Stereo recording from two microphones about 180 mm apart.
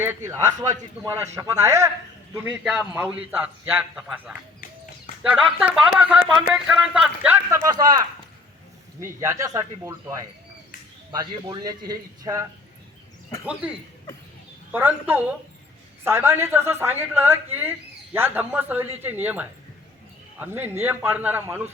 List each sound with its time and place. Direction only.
0.0 s speech: 15° right (ahead or behind)
9.0 s speech: 15° right (ahead or behind)
13.5 s speech: 5° right (ahead or behind)